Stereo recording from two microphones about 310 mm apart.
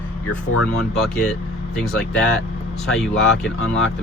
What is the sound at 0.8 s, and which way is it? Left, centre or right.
Speech, centre.